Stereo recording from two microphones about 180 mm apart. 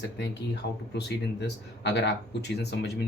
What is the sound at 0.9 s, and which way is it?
Speech, 70° left (ahead or behind).